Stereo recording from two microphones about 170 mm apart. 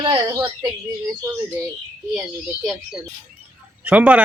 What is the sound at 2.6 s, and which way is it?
Speech, centre (ahead or behind).